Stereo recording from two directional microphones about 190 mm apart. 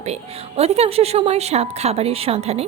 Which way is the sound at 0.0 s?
35° right (ahead or behind).